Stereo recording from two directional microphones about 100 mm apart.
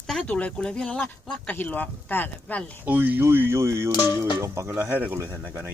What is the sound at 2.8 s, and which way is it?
Speech, 15° right (ahead or behind).